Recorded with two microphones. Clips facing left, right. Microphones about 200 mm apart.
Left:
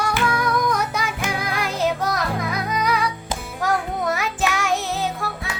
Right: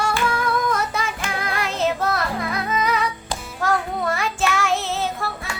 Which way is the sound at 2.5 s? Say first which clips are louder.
Right 2 dB; 10° left (ahead or behind).